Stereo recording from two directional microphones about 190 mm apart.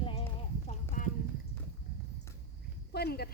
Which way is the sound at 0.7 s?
45° left (ahead or behind).